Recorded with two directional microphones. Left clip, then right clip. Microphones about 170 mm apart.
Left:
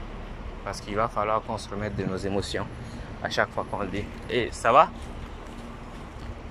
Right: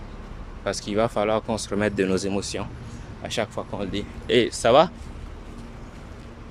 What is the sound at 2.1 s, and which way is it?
Speech, 30° right (ahead or behind).